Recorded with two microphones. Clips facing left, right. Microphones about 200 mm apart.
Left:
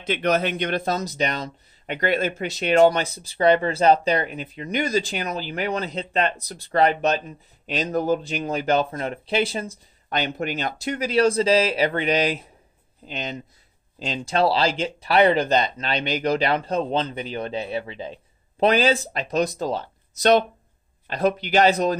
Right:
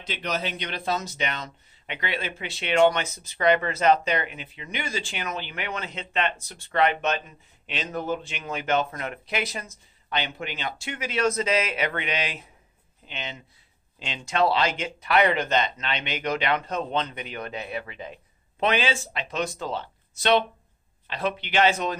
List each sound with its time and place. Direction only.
0.0 s speech: 55° left (ahead or behind); by 21.9 s 40° left (ahead or behind)